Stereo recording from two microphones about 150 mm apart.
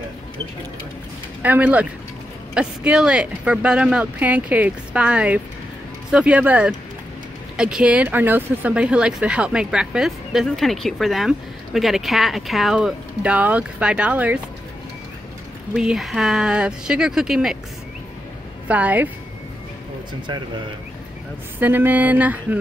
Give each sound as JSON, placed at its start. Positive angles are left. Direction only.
{"t": 1.4, "sound": "speech", "side_deg": -10}
{"t": 15.7, "sound": "speech", "side_deg": -5}
{"t": 18.7, "sound": "speech", "side_deg": -10}
{"t": 21.5, "sound": "speech", "side_deg": -10}